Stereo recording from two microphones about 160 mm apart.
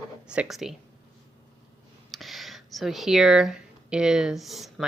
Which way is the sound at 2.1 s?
Centre (ahead or behind).